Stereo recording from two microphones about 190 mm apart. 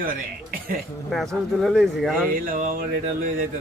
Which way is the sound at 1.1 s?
Centre (ahead or behind).